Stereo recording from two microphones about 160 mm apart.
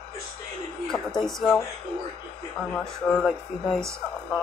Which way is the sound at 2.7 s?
Centre (ahead or behind).